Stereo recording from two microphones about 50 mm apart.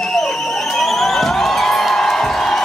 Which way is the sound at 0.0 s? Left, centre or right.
Centre.